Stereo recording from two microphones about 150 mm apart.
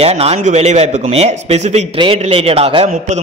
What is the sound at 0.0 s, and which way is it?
A man's voice, 40° right (ahead or behind).